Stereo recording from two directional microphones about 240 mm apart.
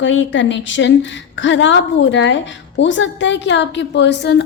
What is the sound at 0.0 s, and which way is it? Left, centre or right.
A woman's voice, left.